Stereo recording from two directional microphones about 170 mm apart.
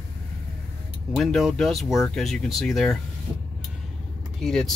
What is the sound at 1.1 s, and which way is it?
Speech, centre (ahead or behind).